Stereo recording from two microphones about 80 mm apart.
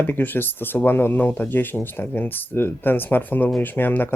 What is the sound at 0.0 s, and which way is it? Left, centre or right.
Speech, left.